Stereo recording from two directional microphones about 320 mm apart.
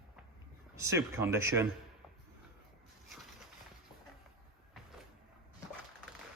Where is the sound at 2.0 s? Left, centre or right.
Centre.